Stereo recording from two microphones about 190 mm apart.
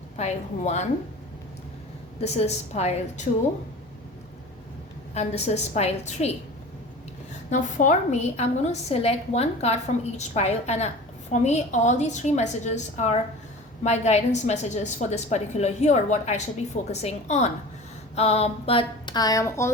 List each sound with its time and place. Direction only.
0.2 s a woman's voice: 35° left (ahead or behind)
2.2 s a woman's voice: 35° left (ahead or behind)
5.1 s a woman's voice: 35° left (ahead or behind)
7.5 s a woman's voice: 40° left (ahead or behind); by 19.7 s 15° left (ahead or behind)